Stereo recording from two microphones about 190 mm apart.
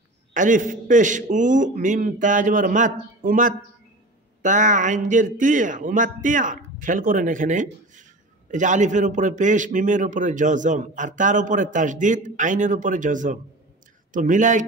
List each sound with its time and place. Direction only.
0.3 s speech: 45° right (ahead or behind)